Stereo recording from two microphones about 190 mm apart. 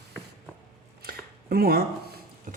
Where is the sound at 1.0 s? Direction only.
50° right (ahead or behind).